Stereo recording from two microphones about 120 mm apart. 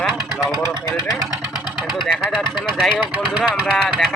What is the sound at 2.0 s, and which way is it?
Speech, 5° left (ahead or behind).